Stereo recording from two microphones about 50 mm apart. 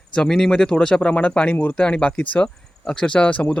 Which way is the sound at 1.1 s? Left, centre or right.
Left.